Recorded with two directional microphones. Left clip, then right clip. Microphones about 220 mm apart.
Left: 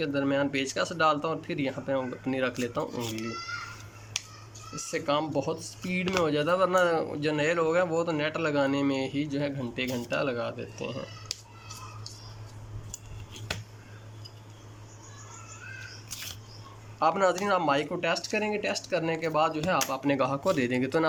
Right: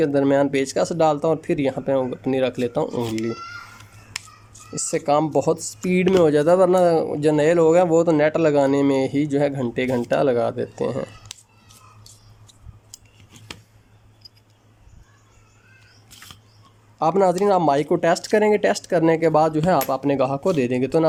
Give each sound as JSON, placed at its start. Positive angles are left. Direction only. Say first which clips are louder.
{"t": 0.0, "sound": "speech", "louder": "right 10 dB", "side_deg": -30}
{"t": 4.7, "sound": "speech", "louder": "right 9 dB", "side_deg": -25}
{"t": 17.0, "sound": "speech", "louder": "right 7 dB", "side_deg": -25}